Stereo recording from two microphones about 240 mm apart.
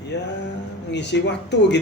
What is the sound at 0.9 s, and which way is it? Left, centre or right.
Speech, left.